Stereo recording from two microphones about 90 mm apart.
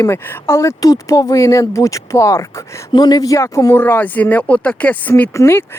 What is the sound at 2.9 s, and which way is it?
Speech, 50° left (ahead or behind).